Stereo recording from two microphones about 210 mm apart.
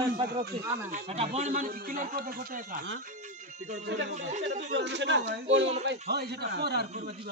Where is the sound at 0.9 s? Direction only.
30° right (ahead or behind).